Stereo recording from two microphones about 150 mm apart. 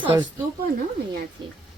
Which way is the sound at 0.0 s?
30° right (ahead or behind).